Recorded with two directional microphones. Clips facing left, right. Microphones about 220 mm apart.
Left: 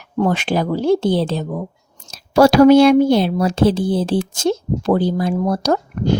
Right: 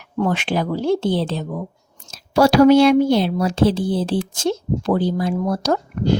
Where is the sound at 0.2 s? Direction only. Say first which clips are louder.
Left 3 dB; 40° left (ahead or behind).